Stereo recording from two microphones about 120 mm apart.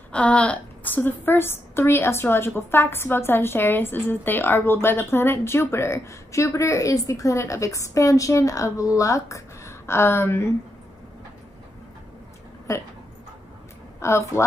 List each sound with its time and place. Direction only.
0.1 s a woman's voice: 10° left (ahead or behind)
12.7 s a woman's voice: 25° left (ahead or behind)
13.9 s speech: 25° left (ahead or behind)